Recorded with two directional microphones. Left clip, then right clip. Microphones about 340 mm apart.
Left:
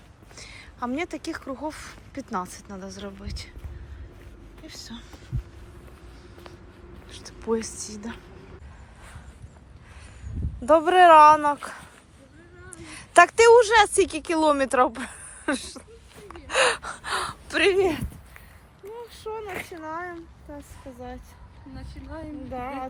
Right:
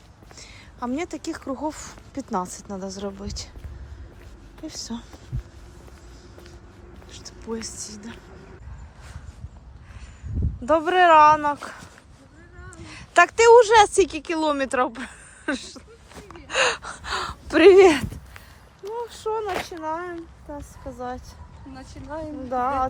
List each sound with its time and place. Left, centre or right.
0.3 s a sound: centre
1.5 s speech: centre
4.6 s speech: centre
7.1 s a woman's voice: centre
10.7 s a woman's voice: centre
16.3 s gasp: centre
17.6 s a woman's voice: right
18.9 s a sound: centre
19.8 s speech: centre
21.8 s a woman's voice: right
22.5 s speech: centre